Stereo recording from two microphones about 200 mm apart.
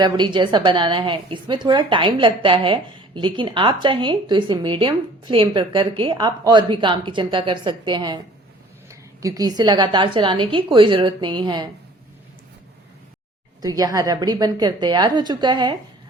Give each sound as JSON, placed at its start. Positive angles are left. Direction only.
{"t": 0.0, "sound": "a woman's voice", "side_deg": -25}
{"t": 13.6, "sound": "a woman's voice", "side_deg": -20}